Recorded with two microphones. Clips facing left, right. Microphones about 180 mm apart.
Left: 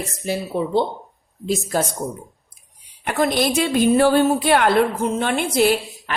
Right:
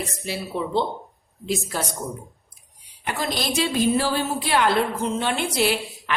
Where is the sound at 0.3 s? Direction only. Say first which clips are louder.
Left 6 dB; 45° left (ahead or behind).